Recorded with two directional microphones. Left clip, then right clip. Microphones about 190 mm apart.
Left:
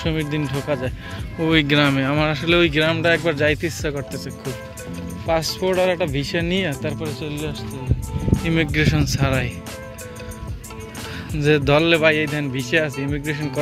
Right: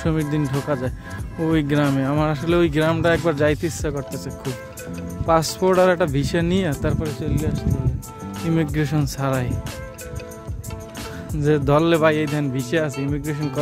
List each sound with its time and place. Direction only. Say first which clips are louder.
0.0 s speech: even; 40° right (ahead or behind)
0.4 s speech: right 1 dB; centre (ahead or behind)
1.4 s speech: left 3 dB; 15° right (ahead or behind)
5.2 s speech: right 2 dB; 35° right (ahead or behind)
8.2 s speech: left 8 dB; centre (ahead or behind)
8.7 s speech: left 4 dB; 30° right (ahead or behind)
11.3 s speech: left 2 dB; 20° right (ahead or behind)